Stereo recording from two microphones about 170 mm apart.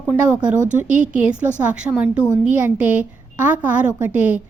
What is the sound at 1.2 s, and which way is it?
A woman's voice, 5° right (ahead or behind).